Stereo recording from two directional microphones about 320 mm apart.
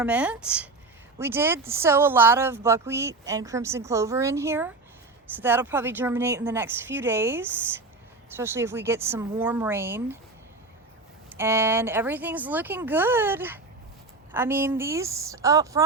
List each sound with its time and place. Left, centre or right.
0.0 s speech: centre
11.3 s speech: centre